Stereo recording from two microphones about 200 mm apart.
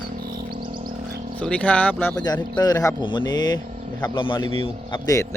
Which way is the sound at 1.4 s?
5° left (ahead or behind).